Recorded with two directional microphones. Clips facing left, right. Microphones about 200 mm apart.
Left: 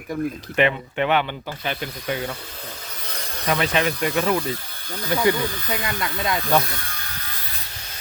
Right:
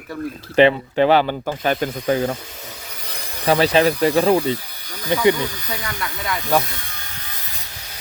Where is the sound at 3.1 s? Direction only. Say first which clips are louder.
Even; 10° right (ahead or behind).